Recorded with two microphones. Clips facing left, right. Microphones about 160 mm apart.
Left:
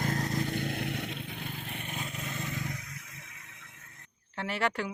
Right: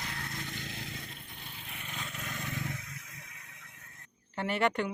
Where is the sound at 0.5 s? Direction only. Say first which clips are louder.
Left 10 dB; 60° left (ahead or behind).